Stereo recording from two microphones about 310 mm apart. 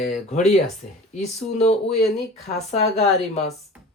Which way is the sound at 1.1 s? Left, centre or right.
Left.